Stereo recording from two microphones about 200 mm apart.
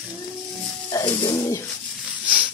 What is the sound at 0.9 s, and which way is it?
Music, 20° left (ahead or behind).